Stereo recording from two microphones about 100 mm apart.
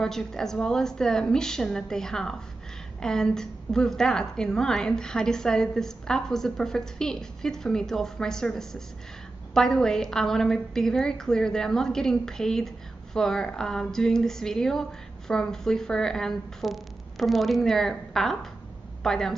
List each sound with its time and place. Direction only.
0.0 s a woman's voice: 5° left (ahead or behind)